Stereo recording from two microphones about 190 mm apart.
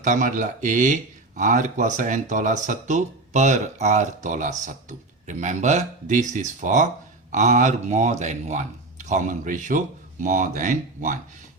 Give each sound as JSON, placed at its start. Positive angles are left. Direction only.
{"t": 0.0, "sound": "speech", "side_deg": -40}